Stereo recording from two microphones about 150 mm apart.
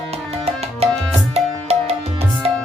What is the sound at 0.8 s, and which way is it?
Tabla, 40° right (ahead or behind).